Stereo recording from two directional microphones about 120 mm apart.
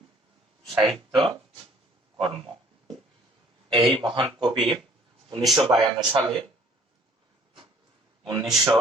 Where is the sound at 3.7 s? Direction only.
40° right (ahead or behind).